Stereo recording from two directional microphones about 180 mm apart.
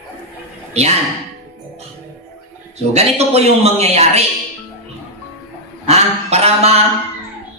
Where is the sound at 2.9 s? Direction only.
35° right (ahead or behind).